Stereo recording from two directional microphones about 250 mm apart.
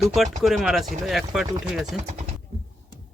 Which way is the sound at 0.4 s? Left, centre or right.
Centre.